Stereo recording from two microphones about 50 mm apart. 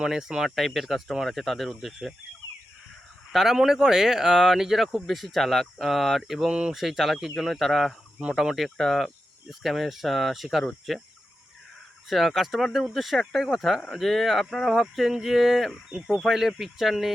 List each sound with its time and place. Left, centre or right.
0.0 s speech: centre
3.3 s speech: centre
6.5 s speech: centre
6.7 s speech: centre
8.2 s speech: centre
12.0 s speech: centre
15.9 s speech: centre
16.2 s speech: centre